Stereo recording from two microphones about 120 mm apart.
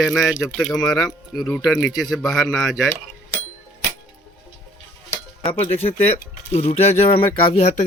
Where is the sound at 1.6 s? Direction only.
Centre (ahead or behind).